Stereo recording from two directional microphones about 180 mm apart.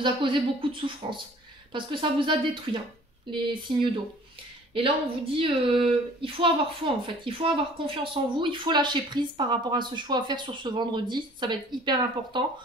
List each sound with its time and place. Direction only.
0.0 s a woman's voice: 30° right (ahead or behind)